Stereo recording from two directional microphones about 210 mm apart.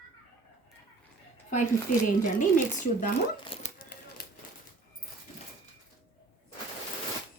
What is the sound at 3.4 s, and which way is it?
Speech, 25° left (ahead or behind).